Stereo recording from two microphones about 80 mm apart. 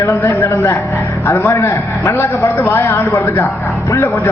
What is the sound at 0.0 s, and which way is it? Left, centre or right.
A man's voice, left.